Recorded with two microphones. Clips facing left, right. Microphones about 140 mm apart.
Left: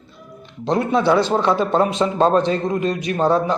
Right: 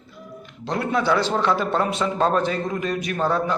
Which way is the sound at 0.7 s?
25° left (ahead or behind).